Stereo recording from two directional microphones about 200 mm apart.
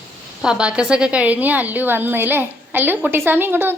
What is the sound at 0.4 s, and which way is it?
A woman's voice, 5° right (ahead or behind).